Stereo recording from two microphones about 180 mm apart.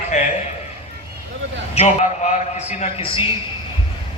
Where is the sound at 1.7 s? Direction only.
40° left (ahead or behind).